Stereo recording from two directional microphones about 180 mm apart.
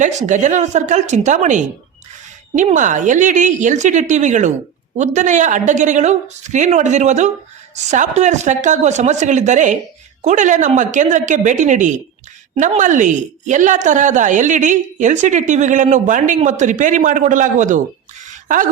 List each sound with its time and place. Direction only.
0.0 s a woman's voice: 40° right (ahead or behind)